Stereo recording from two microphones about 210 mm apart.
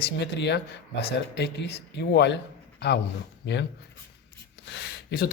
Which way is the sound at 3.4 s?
55° left (ahead or behind).